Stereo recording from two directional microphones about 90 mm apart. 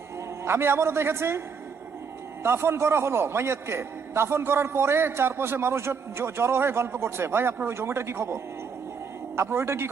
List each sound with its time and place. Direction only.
0.4 s a man's voice: 25° right (ahead or behind)
2.4 s a man's voice: 25° right (ahead or behind)